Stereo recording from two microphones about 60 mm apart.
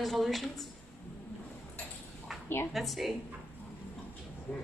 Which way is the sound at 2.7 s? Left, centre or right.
Centre.